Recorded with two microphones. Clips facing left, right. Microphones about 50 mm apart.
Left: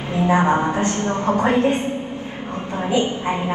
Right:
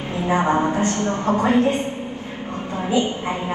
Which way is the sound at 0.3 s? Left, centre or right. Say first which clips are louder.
Left 1 dB; left.